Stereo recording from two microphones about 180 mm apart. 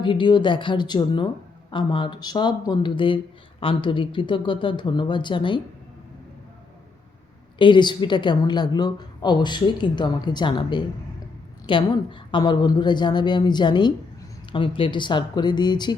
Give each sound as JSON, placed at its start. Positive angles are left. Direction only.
{"t": 0.0, "sound": "a woman's voice", "side_deg": 25}
{"t": 7.6, "sound": "a woman's voice", "side_deg": 25}